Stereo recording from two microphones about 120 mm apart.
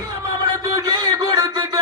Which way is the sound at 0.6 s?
35° right (ahead or behind).